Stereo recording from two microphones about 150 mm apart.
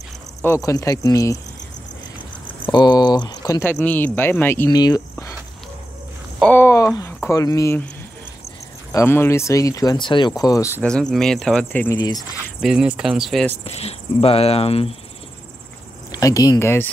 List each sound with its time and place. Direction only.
0.4 s speech: 20° left (ahead or behind)
2.7 s a sound: 30° left (ahead or behind)
3.8 s speech: 10° left (ahead or behind)
4.6 s speech: 25° left (ahead or behind)
6.4 s a sound: 15° left (ahead or behind)
7.2 s speech: 20° left (ahead or behind)
8.9 s speech: 15° left (ahead or behind)
10.8 s speech: 5° left (ahead or behind)
12.5 s speech: 5° right (ahead or behind)
13.7 s speech: 45° left (ahead or behind)
16.1 s speech: 25° left (ahead or behind)